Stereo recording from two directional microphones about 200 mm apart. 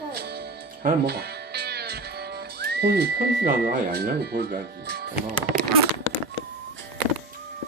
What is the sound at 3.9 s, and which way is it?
Speech, 55° right (ahead or behind).